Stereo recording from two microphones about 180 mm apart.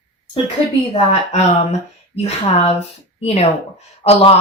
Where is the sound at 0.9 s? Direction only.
35° left (ahead or behind).